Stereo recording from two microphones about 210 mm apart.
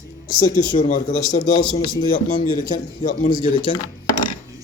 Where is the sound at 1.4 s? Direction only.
35° left (ahead or behind).